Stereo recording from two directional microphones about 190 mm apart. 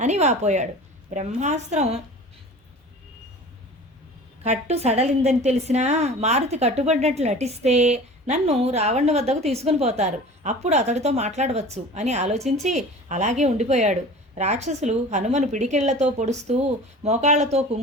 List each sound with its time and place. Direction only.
0.0 s a woman's voice: 35° right (ahead or behind)
4.4 s a woman's voice: 35° right (ahead or behind)